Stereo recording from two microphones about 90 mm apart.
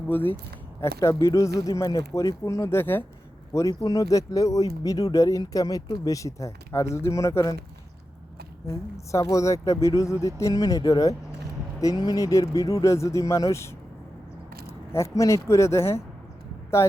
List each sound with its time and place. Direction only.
0.1 s speech: 20° left (ahead or behind)
8.6 s speech: 35° left (ahead or behind)